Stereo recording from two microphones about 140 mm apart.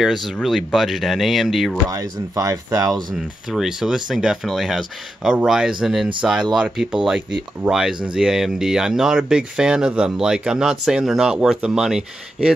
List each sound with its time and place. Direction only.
0.0 s speech: centre (ahead or behind)
1.9 s speech: 25° right (ahead or behind)
3.2 s speech: 5° right (ahead or behind)